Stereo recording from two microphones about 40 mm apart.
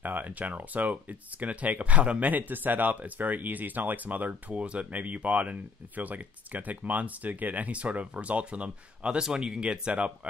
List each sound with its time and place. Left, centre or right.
0.0 s speech: right